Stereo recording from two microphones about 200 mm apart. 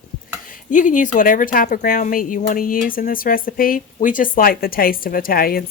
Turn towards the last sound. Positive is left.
turn(degrees=45)  # may be behind; listen again after turning